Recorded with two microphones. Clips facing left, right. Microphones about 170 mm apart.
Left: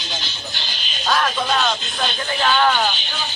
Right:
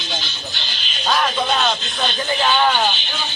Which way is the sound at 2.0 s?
5° right (ahead or behind).